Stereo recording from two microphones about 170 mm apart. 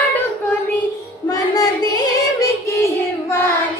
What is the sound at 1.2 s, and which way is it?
Child singing, 20° left (ahead or behind).